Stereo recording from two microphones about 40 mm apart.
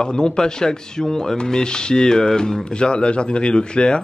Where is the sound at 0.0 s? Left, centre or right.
Left.